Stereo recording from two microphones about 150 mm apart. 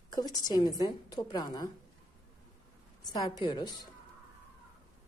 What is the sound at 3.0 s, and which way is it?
Speech, 30° left (ahead or behind).